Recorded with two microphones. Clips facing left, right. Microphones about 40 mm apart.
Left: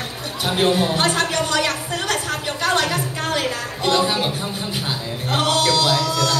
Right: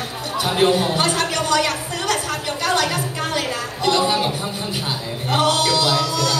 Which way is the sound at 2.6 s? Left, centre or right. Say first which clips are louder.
Even; left.